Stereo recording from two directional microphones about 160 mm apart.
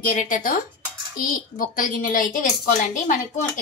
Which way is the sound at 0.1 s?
60° left (ahead or behind).